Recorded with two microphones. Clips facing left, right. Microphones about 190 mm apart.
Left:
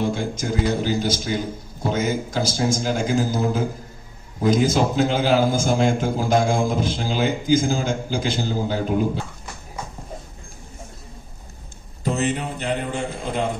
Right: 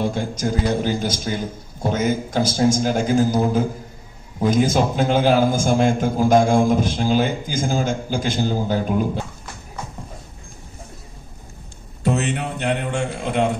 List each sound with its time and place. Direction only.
0.1 s a man's voice: 45° right (ahead or behind)
4.5 s a man's voice: 50° right (ahead or behind)
12.0 s a man's voice: 70° right (ahead or behind)